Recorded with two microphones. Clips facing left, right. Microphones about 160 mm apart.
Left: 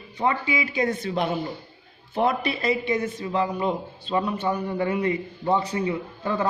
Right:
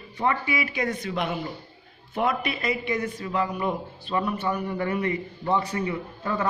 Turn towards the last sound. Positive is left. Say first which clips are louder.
# left 2 dB
turn(degrees=25)  # may be behind; listen again after turning